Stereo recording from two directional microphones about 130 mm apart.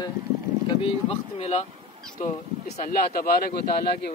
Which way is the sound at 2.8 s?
90° left.